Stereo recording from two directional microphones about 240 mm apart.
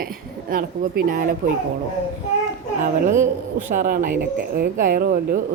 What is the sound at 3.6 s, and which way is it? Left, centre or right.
Speech, right.